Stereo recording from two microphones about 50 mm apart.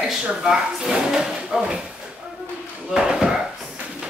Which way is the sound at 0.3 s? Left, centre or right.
Centre.